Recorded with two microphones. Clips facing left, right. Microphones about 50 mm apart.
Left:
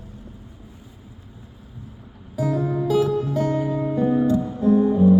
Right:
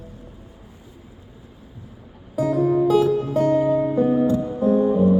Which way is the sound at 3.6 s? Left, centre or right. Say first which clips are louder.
Right 4 dB; centre.